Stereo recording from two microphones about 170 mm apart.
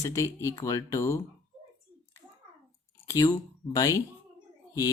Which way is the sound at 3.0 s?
20° left (ahead or behind).